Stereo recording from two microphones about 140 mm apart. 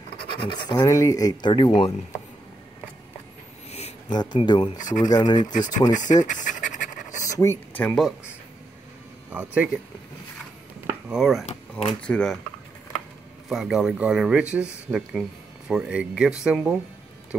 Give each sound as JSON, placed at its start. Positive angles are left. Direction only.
{"t": 0.3, "sound": "speech", "side_deg": 35}
{"t": 0.7, "sound": "speech", "side_deg": 20}
{"t": 4.1, "sound": "speech", "side_deg": 30}
{"t": 4.7, "sound": "speech", "side_deg": 65}
{"t": 5.0, "sound": "speech", "side_deg": 30}
{"t": 5.7, "sound": "speech", "side_deg": 65}
{"t": 6.2, "sound": "pant", "side_deg": 65}
{"t": 7.2, "sound": "a sound", "side_deg": 20}
{"t": 9.3, "sound": "speech", "side_deg": -10}
{"t": 10.9, "sound": "speech", "side_deg": -5}
{"t": 13.5, "sound": "speech", "side_deg": 0}